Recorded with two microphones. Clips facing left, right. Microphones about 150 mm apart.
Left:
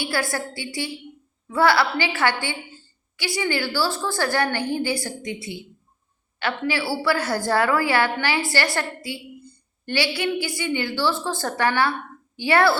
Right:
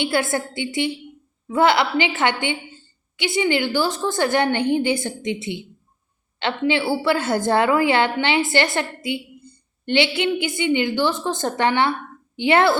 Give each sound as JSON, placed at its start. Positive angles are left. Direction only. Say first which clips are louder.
{"t": 0.0, "sound": "a woman's voice", "louder": "right 4 dB", "side_deg": -20}